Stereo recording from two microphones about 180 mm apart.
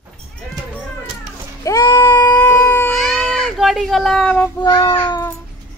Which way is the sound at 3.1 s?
Centre (ahead or behind).